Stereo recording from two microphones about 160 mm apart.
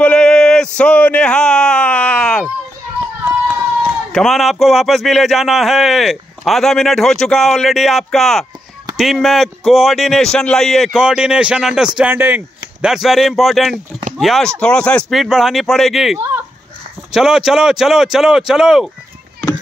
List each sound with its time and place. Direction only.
0.0 s speech: 5° left (ahead or behind)
3.3 s run: 10° right (ahead or behind)
4.1 s speech: centre (ahead or behind)